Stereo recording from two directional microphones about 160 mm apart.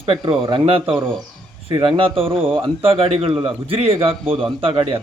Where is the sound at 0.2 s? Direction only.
25° right (ahead or behind).